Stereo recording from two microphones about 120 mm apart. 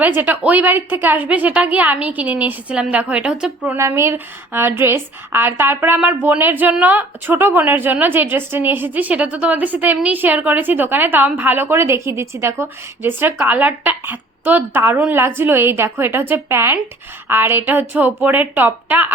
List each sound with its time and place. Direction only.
0.0 s a woman's voice: 15° right (ahead or behind)
3.8 s a woman's voice: 25° right (ahead or behind)